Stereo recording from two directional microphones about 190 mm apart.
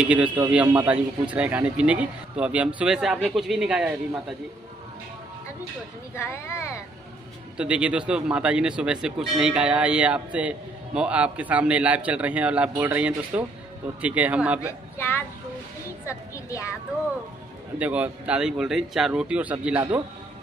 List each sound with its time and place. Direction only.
0.0 s a man's voice: 5° right (ahead or behind)
6.1 s speech: 15° left (ahead or behind)
7.5 s a man's voice: 5° right (ahead or behind)
15.0 s speech: 10° left (ahead or behind)
17.7 s speech: 10° right (ahead or behind)